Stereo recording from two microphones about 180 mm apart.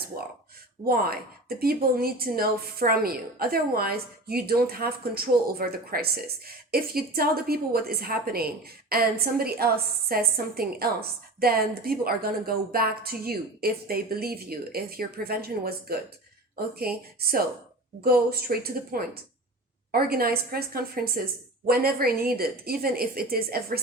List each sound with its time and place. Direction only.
0.9 s a woman's voice: 55° right (ahead or behind)